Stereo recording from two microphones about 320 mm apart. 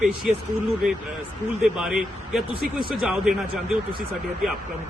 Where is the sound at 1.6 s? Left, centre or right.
Centre.